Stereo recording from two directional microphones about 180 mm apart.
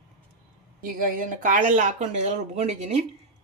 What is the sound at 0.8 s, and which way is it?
Speech, 50° right (ahead or behind).